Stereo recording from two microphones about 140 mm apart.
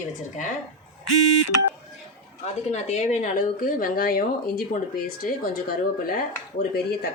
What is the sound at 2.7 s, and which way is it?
Speech, 55° left (ahead or behind).